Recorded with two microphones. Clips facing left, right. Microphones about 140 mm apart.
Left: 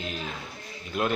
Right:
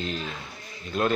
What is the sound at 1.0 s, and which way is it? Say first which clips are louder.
Speech: right 2 dB; 10° left (ahead or behind).